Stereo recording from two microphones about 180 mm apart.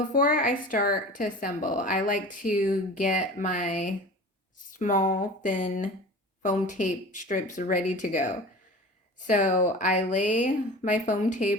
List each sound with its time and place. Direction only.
0.0 s a woman's voice: 50° left (ahead or behind)